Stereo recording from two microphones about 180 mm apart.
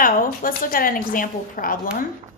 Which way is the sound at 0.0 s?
50° left (ahead or behind).